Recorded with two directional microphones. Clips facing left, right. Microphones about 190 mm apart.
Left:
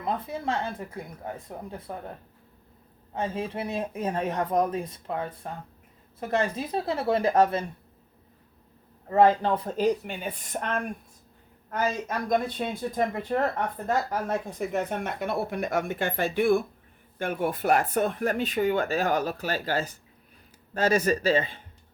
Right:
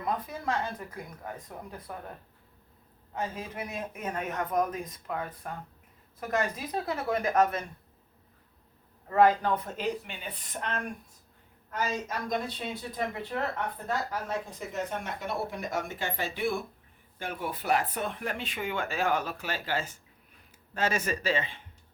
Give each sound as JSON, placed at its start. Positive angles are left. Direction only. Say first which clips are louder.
{"t": 0.0, "sound": "speech", "louder": "left 2 dB", "side_deg": 25}
{"t": 3.2, "sound": "speech", "louder": "left 5 dB", "side_deg": 30}
{"t": 9.0, "sound": "a man's voice", "louder": "left 3 dB", "side_deg": 25}